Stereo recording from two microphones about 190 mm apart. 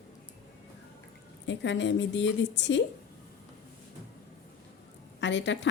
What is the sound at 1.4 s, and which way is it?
A woman's voice, 70° left (ahead or behind).